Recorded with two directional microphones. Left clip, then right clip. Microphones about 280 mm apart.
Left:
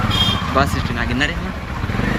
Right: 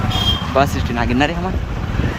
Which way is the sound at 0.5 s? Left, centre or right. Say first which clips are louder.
Right 2 dB; centre.